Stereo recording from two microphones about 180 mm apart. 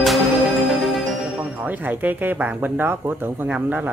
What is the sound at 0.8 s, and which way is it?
Speech, centre (ahead or behind).